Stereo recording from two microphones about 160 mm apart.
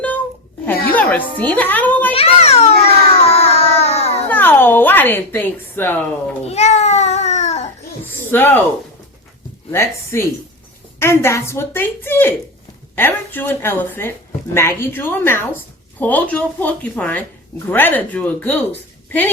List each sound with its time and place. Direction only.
0.9 s music: 10° left (ahead or behind)
2.1 s a sound: 40° left (ahead or behind)
4.3 s speech: 10° left (ahead or behind)
6.4 s babbling: 45° left (ahead or behind)
8.0 s a sound: 10° left (ahead or behind)
9.7 s a woman's voice: 15° left (ahead or behind)